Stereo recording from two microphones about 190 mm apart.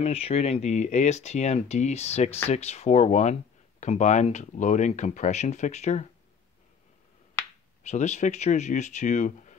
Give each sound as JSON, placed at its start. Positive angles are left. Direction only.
{"t": 0.0, "sound": "speech", "side_deg": 30}
{"t": 7.8, "sound": "speech", "side_deg": 35}